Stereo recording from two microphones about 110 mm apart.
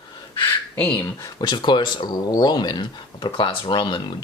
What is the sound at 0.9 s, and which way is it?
Speech, 40° left (ahead or behind).